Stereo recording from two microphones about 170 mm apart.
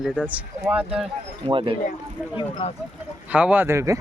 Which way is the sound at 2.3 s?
30° left (ahead or behind).